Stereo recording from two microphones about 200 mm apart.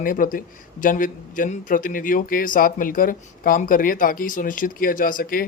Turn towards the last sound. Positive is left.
turn(degrees=45)  # may be behind; listen again after turning